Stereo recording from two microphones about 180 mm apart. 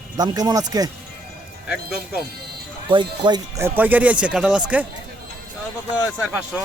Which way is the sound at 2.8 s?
25° right (ahead or behind).